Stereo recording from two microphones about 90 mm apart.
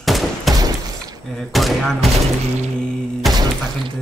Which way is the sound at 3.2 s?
Centre (ahead or behind).